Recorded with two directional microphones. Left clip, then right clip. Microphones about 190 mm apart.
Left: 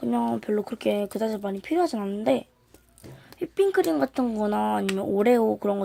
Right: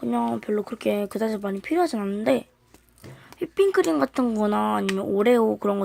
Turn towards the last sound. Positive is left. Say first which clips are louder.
# right 1 dB
turn(degrees=-5)  # may be behind; listen again after turning